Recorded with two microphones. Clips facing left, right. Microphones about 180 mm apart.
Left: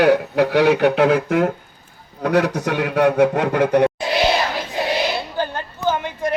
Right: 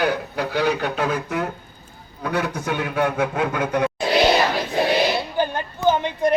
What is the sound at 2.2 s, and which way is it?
A man's voice, 80° left.